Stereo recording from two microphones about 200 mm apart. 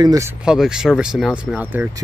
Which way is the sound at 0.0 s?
15° right (ahead or behind).